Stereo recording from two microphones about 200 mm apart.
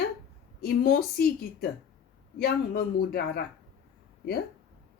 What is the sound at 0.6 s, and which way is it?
Speech, 50° left (ahead or behind).